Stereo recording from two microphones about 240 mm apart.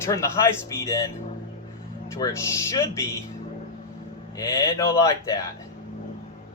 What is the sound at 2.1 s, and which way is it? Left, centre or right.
Speech, centre.